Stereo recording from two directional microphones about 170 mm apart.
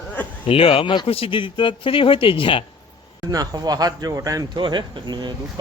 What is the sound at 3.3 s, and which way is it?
Speech, 20° right (ahead or behind).